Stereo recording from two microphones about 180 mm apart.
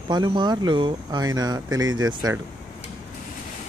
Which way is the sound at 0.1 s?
25° right (ahead or behind).